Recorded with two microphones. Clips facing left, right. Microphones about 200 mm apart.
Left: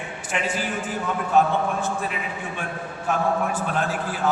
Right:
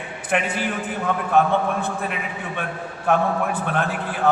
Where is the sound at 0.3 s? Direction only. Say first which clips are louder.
Right 4 dB; 60° right (ahead or behind).